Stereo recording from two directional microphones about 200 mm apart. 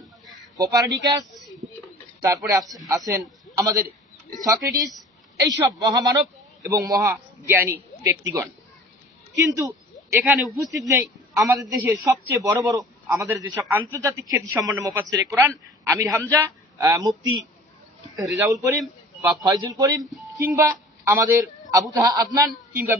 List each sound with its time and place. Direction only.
0.6 s speech: 20° right (ahead or behind)
2.2 s a man's voice: 15° right (ahead or behind)
10.2 s speech: 5° right (ahead or behind)
10.8 s a man's voice: 15° right (ahead or behind)
18.4 s a man's voice: 15° right (ahead or behind)